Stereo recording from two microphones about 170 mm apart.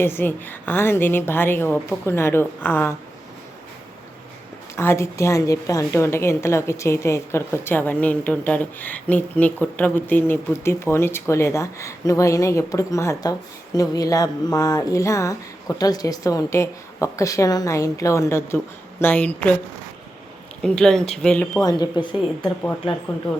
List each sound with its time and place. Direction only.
0.0 s a woman's voice: 10° left (ahead or behind)
4.7 s a woman's voice: 15° left (ahead or behind)
20.6 s speech: 5° left (ahead or behind)
21.6 s speech: 25° left (ahead or behind)